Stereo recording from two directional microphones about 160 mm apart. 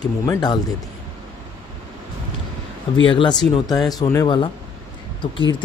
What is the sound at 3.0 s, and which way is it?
Speech, 30° left (ahead or behind).